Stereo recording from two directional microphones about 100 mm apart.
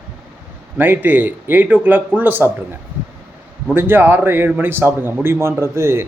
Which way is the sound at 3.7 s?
20° right (ahead or behind).